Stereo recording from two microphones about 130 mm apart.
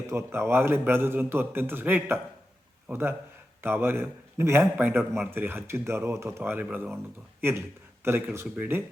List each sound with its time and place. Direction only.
0.1 s a man's voice: 20° right (ahead or behind)